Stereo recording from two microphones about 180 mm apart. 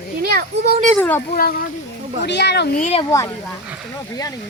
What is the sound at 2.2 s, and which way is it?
Speech, 70° left (ahead or behind).